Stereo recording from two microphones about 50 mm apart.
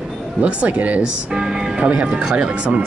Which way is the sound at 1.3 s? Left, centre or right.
Centre.